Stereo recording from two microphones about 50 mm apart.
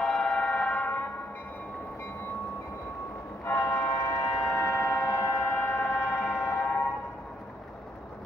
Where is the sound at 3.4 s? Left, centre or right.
Left.